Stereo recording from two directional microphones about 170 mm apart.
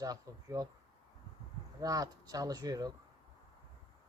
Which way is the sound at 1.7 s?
20° right (ahead or behind).